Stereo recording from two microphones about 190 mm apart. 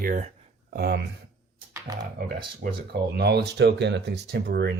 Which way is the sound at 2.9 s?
60° right (ahead or behind).